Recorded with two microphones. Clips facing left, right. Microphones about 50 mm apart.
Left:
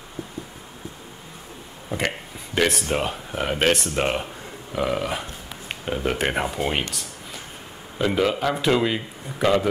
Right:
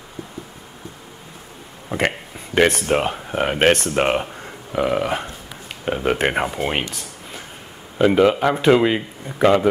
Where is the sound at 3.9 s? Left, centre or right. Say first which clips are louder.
Right 5 dB; right.